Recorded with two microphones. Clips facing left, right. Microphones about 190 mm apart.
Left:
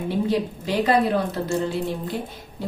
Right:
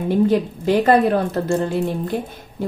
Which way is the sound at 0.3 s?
50° right (ahead or behind).